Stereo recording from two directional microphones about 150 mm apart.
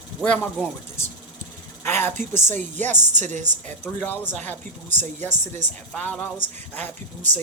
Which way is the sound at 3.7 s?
10° left (ahead or behind).